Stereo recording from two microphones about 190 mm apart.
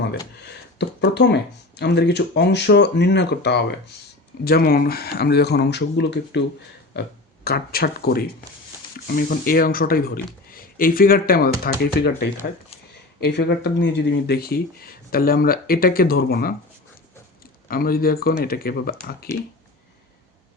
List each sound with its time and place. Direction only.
0.4 s speech: 60° left (ahead or behind)
7.4 s speech: 55° left (ahead or behind)
13.1 s speech: 60° left (ahead or behind)
17.7 s speech: 50° left (ahead or behind)